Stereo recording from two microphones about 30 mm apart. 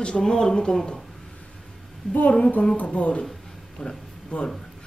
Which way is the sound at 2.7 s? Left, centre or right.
Left.